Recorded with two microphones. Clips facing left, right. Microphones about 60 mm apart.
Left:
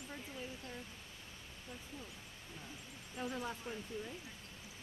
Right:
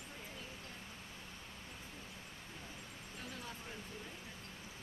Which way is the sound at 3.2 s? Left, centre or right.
Left.